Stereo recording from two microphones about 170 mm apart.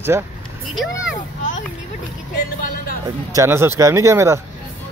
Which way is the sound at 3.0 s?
20° right (ahead or behind).